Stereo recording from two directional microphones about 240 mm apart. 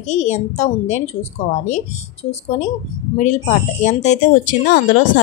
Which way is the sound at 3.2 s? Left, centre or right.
Left.